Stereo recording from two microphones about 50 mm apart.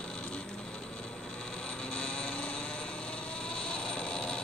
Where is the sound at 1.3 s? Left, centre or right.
Centre.